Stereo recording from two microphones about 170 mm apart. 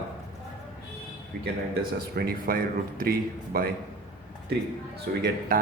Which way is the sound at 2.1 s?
60° right (ahead or behind).